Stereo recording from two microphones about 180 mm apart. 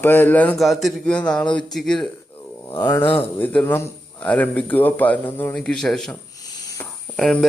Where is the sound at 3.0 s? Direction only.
30° left (ahead or behind).